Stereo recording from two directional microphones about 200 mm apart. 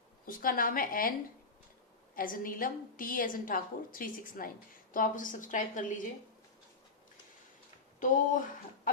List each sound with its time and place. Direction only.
0.3 s a woman's voice: 45° left (ahead or behind)
2.1 s a woman's voice: 45° left (ahead or behind)
7.9 s speech: 40° left (ahead or behind)